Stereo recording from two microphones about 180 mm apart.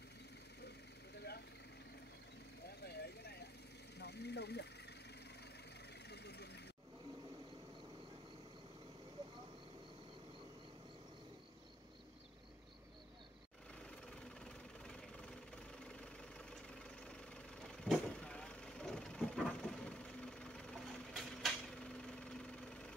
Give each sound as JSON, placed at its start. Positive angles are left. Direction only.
{"t": 0.6, "sound": "vehicle", "side_deg": 65}
{"t": 2.6, "sound": "vehicle", "side_deg": 65}
{"t": 6.0, "sound": "vehicle", "side_deg": 65}
{"t": 13.7, "sound": "vehicle", "side_deg": 5}